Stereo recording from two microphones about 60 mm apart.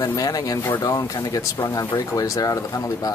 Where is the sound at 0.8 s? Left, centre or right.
Left.